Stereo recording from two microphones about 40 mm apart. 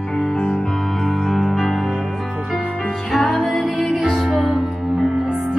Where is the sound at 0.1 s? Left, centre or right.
Centre.